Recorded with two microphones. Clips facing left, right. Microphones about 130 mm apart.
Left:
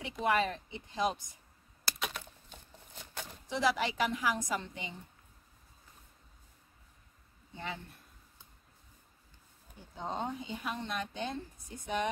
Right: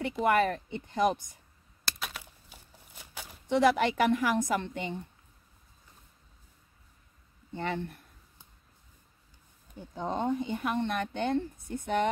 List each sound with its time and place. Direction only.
0.2 s speech: 55° right (ahead or behind)
2.0 s a sound: 5° right (ahead or behind)
3.4 s speech: 60° right (ahead or behind)
7.5 s speech: 65° right (ahead or behind)
9.9 s speech: 55° right (ahead or behind)